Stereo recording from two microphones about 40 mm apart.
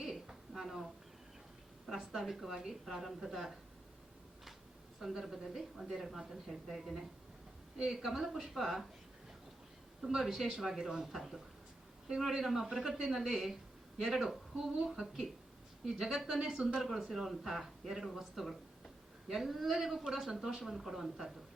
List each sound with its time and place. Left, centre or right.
0.0 s a sound: centre
1.9 s speech: centre
4.9 s a woman's voice: centre
10.0 s a woman's voice: centre